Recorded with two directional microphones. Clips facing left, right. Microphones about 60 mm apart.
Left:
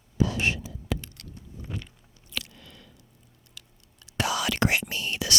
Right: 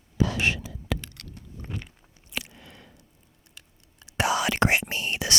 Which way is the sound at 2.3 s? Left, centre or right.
Right.